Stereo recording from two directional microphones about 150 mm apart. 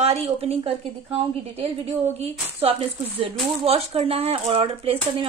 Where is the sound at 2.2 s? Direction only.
45° right (ahead or behind).